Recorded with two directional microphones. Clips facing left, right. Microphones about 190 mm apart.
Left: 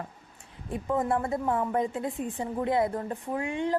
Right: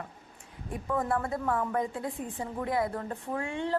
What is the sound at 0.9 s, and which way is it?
A woman's voice, 20° left (ahead or behind).